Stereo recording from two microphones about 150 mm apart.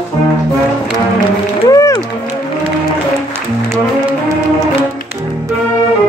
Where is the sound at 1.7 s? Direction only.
20° left (ahead or behind).